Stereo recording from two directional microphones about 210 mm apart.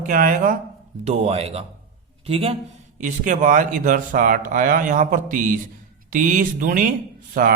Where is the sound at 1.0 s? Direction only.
30° right (ahead or behind).